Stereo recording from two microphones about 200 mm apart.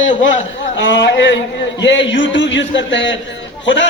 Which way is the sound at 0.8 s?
65° left (ahead or behind).